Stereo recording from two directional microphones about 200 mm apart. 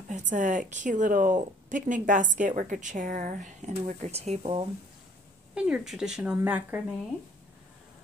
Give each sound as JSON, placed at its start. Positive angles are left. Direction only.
{"t": 0.3, "sound": "a woman's voice", "side_deg": -40}
{"t": 5.5, "sound": "speech", "side_deg": -5}